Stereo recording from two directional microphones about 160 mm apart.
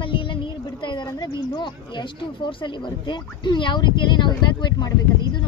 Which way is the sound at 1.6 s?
30° left (ahead or behind).